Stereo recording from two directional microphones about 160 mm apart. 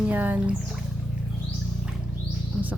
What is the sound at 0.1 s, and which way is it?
Speech, 10° right (ahead or behind).